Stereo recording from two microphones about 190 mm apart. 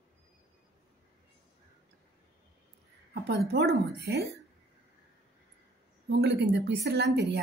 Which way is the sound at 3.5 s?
60° right (ahead or behind).